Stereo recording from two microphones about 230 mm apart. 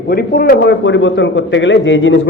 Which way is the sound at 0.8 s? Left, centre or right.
Left.